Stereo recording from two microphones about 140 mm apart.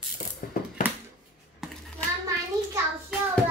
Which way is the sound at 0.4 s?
90° left.